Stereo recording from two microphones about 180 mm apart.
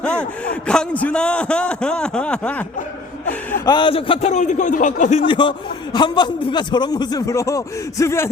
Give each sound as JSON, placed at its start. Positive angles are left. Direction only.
{"t": 0.0, "sound": "a sound", "side_deg": 5}
{"t": 0.7, "sound": "a man's voice", "side_deg": 5}
{"t": 3.7, "sound": "a man's voice", "side_deg": 25}
{"t": 5.2, "sound": "a man's voice", "side_deg": 30}